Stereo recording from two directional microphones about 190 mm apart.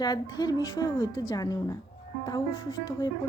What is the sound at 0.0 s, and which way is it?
A woman's voice, 20° left (ahead or behind).